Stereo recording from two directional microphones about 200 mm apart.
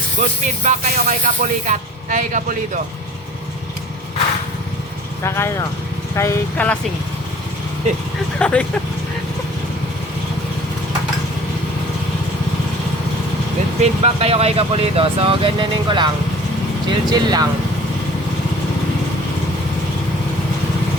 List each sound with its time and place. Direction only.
0.2 s speech: 35° right (ahead or behind)
5.2 s speech: 15° left (ahead or behind)
8.4 s speech: 5° left (ahead or behind)
13.8 s speech: 30° right (ahead or behind)